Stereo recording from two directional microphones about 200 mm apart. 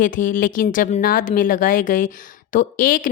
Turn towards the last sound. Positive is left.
turn(degrees=45)  # may be behind; listen again after turning